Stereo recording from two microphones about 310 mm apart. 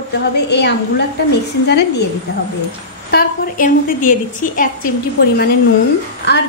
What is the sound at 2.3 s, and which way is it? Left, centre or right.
A woman's voice, left.